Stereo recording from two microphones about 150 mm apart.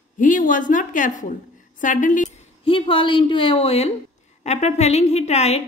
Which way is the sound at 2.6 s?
35° left (ahead or behind).